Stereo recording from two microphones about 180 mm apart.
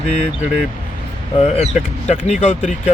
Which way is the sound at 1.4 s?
35° left (ahead or behind).